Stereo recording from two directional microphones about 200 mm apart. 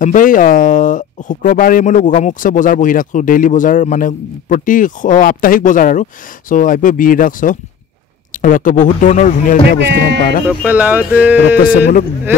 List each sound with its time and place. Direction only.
0.0 s speech: 40° left (ahead or behind)
10.4 s speech: 10° right (ahead or behind)
11.5 s speech: 45° left (ahead or behind)